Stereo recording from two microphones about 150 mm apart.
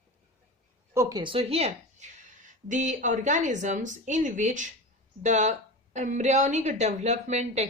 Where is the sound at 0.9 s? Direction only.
20° right (ahead or behind).